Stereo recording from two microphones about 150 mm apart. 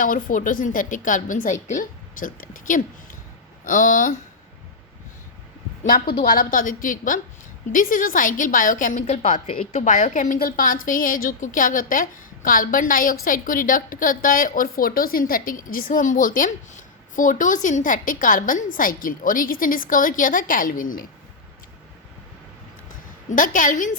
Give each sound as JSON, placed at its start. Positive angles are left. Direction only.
{"t": 0.0, "sound": "a woman's voice", "side_deg": 65}
{"t": 5.8, "sound": "a woman's voice", "side_deg": 75}
{"t": 9.5, "sound": "a woman's voice", "side_deg": 40}
{"t": 9.8, "sound": "a woman's voice", "side_deg": 55}
{"t": 23.3, "sound": "a woman's voice", "side_deg": 60}